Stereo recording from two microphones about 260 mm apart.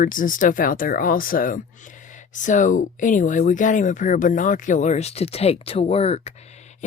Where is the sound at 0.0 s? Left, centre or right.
Left.